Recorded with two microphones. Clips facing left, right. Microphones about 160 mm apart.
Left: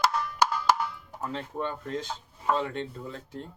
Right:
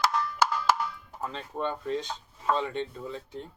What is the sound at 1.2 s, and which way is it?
Speech, centre (ahead or behind).